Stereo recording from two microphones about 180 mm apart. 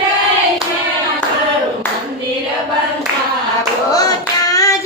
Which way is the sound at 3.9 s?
20° left (ahead or behind).